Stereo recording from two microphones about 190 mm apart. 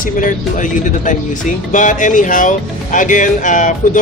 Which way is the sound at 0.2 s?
45° left (ahead or behind).